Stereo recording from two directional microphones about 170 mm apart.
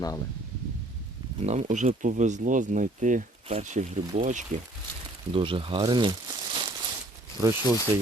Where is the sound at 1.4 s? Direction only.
45° right (ahead or behind).